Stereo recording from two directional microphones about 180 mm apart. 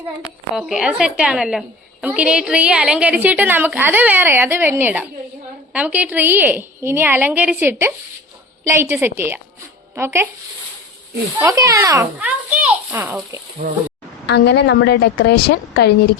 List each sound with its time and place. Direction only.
0.5 s a woman's voice: 5° right (ahead or behind)
11.3 s a woman's voice: 20° right (ahead or behind)
14.3 s a woman's voice: 70° left (ahead or behind)